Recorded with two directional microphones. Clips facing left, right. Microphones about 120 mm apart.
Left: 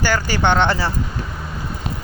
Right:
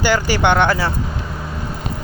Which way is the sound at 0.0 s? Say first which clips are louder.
Right 3 dB; 15° right (ahead or behind).